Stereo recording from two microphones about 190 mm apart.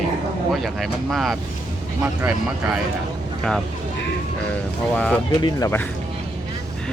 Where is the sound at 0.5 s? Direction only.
Centre (ahead or behind).